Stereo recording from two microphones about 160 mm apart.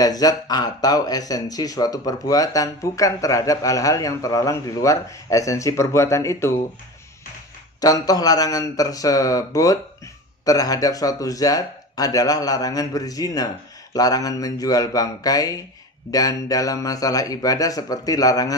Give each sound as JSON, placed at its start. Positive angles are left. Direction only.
{"t": 0.0, "sound": "speech", "side_deg": 25}
{"t": 7.8, "sound": "speech", "side_deg": 25}